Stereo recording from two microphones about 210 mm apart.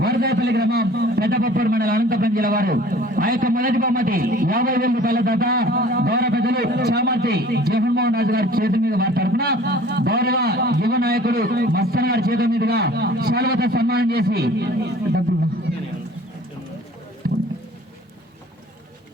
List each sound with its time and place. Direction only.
0.0 s a man's voice: 50° right (ahead or behind)